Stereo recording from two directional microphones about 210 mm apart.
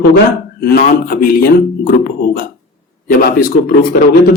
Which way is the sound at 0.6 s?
45° left (ahead or behind).